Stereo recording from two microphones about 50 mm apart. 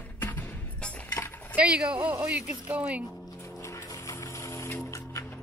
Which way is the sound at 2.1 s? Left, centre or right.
Right.